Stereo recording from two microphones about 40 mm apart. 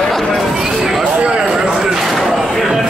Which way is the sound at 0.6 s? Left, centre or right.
Centre.